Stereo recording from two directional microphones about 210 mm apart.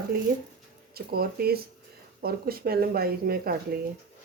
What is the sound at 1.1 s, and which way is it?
Speech, 45° right (ahead or behind).